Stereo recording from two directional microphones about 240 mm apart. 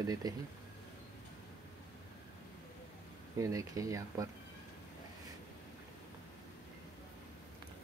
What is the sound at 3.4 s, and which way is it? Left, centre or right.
Speech, centre.